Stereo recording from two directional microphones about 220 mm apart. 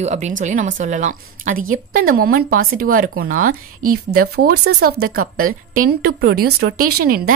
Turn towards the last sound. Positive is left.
turn(degrees=-40)  # may be behind; listen again after turning